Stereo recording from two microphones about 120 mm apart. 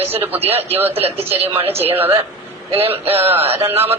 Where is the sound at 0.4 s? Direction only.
55° right (ahead or behind).